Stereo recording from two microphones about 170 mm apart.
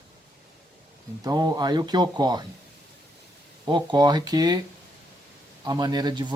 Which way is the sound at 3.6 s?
25° right (ahead or behind).